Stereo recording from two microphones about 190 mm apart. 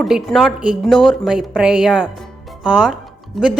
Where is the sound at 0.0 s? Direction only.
Centre (ahead or behind).